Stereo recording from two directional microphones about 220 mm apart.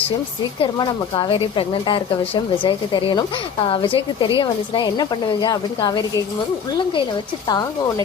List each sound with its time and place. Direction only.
0.6 s a woman's voice: 20° left (ahead or behind)
7.4 s a woman's voice: 20° left (ahead or behind)